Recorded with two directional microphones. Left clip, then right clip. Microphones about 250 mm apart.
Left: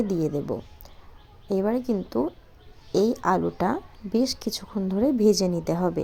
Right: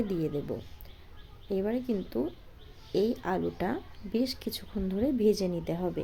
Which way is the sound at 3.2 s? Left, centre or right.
Centre.